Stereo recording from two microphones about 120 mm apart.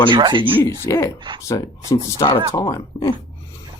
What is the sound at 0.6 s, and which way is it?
Speech, 20° left (ahead or behind).